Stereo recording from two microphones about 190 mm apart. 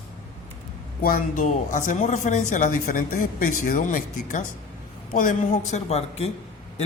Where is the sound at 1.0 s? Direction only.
50° left (ahead or behind).